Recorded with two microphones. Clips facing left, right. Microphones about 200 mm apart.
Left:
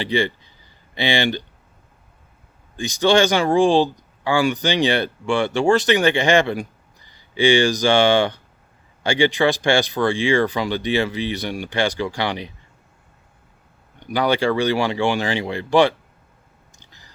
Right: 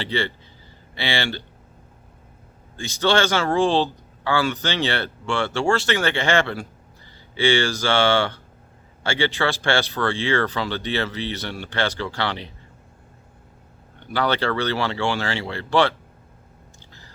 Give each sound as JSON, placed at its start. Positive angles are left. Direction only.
{"t": 0.0, "sound": "speech", "side_deg": 15}
{"t": 2.7, "sound": "speech", "side_deg": 15}
{"t": 14.1, "sound": "speech", "side_deg": 15}
{"t": 16.9, "sound": "a sound", "side_deg": 15}